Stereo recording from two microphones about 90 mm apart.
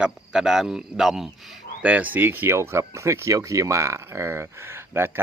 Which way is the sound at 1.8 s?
20° right (ahead or behind).